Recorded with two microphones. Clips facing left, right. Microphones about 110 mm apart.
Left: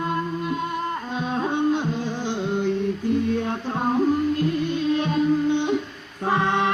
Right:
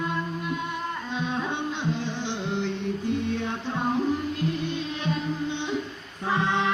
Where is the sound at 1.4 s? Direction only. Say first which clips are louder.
Left 7 dB; 45° left (ahead or behind).